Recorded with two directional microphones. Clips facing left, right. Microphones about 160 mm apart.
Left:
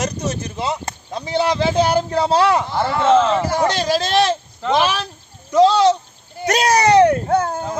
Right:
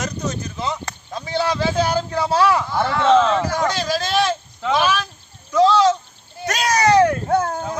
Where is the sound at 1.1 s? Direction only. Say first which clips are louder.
Left 3 dB; 20° left (ahead or behind).